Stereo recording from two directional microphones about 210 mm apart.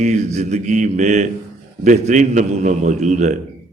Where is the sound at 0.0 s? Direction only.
35° right (ahead or behind).